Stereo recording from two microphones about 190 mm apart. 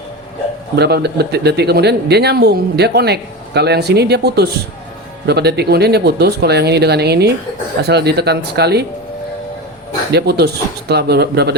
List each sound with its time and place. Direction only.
0.8 s speech: 60° right (ahead or behind)
10.1 s speech: 60° right (ahead or behind)